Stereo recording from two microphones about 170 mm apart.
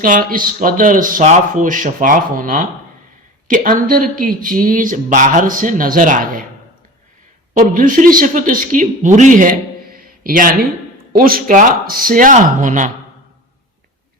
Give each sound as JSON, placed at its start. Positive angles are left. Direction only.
{"t": 0.0, "sound": "speech", "side_deg": -55}
{"t": 7.5, "sound": "speech", "side_deg": -50}